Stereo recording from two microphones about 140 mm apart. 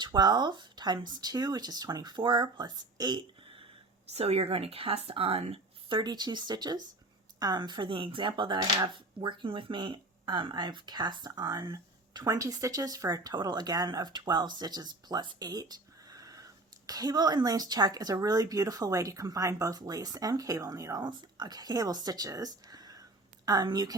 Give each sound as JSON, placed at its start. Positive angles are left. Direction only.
{"t": 0.0, "sound": "speech", "side_deg": -30}
{"t": 6.0, "sound": "speech", "side_deg": -30}